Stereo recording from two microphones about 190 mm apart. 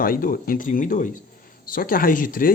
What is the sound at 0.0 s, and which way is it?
Speech, 50° left (ahead or behind).